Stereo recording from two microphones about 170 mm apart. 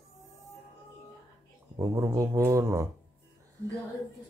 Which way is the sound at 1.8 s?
20° right (ahead or behind).